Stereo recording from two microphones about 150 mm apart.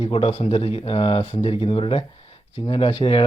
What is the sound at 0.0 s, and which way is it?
Speech, 40° left (ahead or behind).